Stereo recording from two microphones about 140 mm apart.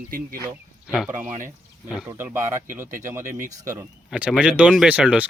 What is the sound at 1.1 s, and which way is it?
Speech, 60° right (ahead or behind).